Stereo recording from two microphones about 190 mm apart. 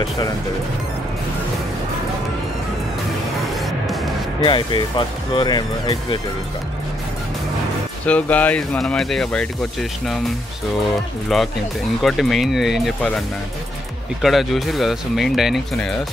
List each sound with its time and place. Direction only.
3.8 s music: centre (ahead or behind)
4.4 s speech: 25° left (ahead or behind)
8.0 s speech: 5° left (ahead or behind)
11.3 s speech: centre (ahead or behind)
14.2 s speech: centre (ahead or behind)